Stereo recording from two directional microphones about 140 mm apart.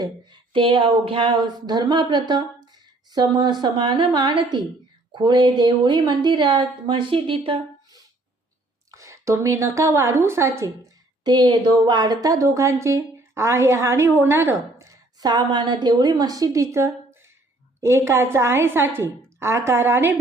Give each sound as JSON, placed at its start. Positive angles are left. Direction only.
{"t": 0.0, "sound": "a woman's voice", "side_deg": -35}
{"t": 8.9, "sound": "a woman's voice", "side_deg": -20}
{"t": 11.2, "sound": "a woman's voice", "side_deg": -30}